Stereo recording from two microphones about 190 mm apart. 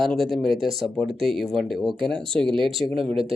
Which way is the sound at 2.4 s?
25° right (ahead or behind).